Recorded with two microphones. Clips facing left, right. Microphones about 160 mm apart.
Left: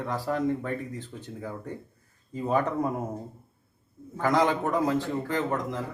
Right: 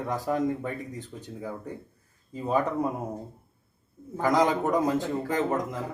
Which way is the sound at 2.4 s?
10° right (ahead or behind).